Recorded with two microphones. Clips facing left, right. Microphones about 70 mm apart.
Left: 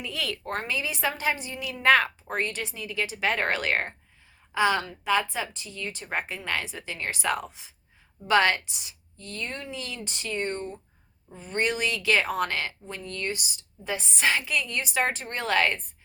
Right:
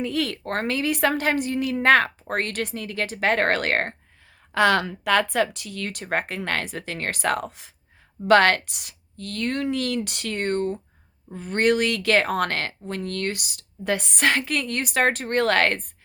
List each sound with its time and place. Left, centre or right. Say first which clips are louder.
0.0 s speech: right 7 dB; right
2.3 s speech: right 4 dB; right
4.5 s speech: right 5 dB; right